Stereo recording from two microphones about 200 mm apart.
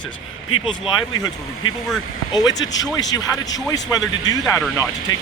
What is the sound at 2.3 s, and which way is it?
Speech, 20° left (ahead or behind).